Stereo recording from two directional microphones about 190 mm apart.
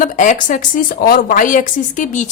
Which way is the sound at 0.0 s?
40° left (ahead or behind).